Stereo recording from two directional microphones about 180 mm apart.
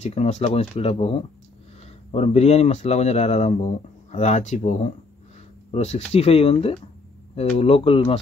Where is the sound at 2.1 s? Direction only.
35° left (ahead or behind).